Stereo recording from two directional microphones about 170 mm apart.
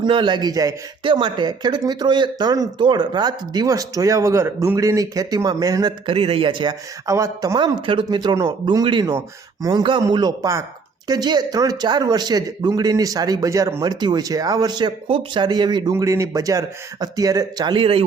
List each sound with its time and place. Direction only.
0.0 s speech: 25° right (ahead or behind)